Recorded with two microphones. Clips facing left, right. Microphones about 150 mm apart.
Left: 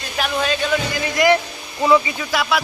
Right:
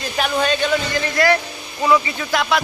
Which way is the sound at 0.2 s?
Centre (ahead or behind).